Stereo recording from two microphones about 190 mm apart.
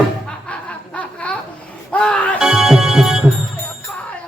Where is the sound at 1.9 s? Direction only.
5° left (ahead or behind).